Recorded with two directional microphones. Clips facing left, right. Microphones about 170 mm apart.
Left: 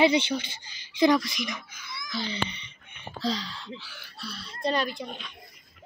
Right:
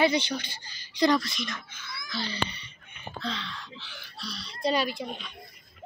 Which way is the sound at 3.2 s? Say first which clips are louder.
Left 5 dB; 35° left (ahead or behind).